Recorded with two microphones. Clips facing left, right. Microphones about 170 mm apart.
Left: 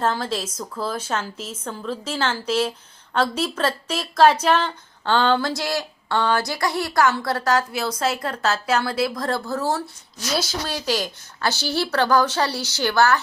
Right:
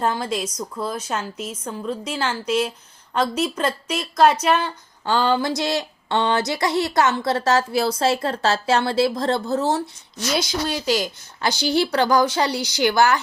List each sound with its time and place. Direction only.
0.0 s speech: 10° right (ahead or behind)
0.4 s speech: 5° left (ahead or behind)
0.9 s speech: 10° right (ahead or behind)
4.4 s a sound: 10° right (ahead or behind)
10.5 s speech: 10° right (ahead or behind)